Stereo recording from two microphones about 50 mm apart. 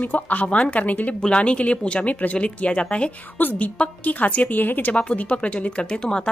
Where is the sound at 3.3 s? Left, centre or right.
Left.